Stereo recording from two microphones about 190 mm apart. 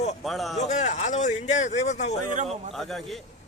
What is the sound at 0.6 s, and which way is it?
Speech, 35° left (ahead or behind).